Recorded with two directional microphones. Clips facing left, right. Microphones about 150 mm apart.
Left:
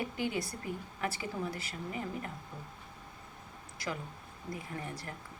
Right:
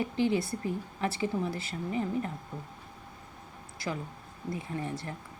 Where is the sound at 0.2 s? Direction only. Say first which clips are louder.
Right 7 dB; 30° right (ahead or behind).